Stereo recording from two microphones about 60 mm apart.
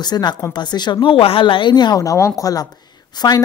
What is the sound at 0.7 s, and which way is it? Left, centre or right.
Speech, left.